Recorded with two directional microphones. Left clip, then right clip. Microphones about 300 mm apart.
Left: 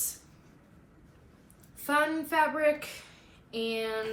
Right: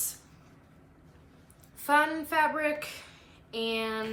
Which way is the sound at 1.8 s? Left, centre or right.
Centre.